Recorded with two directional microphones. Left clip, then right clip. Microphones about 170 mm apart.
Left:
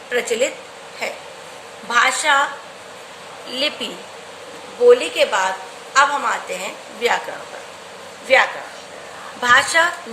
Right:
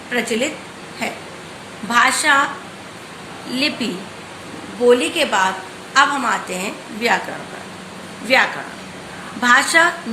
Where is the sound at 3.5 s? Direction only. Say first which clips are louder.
Right 1 dB; 15° left (ahead or behind).